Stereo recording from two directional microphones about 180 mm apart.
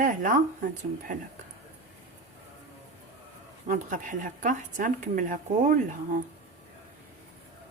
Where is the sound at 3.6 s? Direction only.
45° right (ahead or behind).